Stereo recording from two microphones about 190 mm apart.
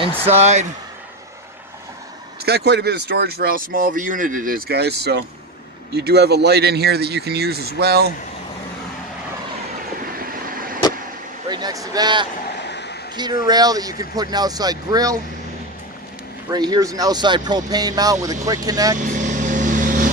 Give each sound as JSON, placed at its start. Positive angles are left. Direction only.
{"t": 0.4, "sound": "speech", "side_deg": -35}
{"t": 2.4, "sound": "speech", "side_deg": -60}
{"t": 10.1, "sound": "vehicle", "side_deg": -50}
{"t": 11.4, "sound": "speech", "side_deg": -20}
{"t": 12.5, "sound": "a sound", "side_deg": 65}
{"t": 13.1, "sound": "speech", "side_deg": -20}
{"t": 16.4, "sound": "speech", "side_deg": -20}
{"t": 18.9, "sound": "vehicle", "side_deg": -40}